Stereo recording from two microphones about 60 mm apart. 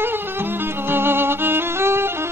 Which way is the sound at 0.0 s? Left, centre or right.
Right.